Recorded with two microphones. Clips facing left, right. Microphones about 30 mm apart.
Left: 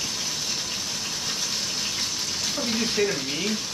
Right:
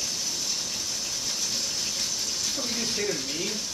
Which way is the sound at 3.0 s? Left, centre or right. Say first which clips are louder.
Left 5 dB; left.